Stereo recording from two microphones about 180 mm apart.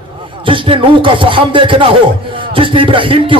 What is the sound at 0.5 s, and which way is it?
Speech, 30° right (ahead or behind).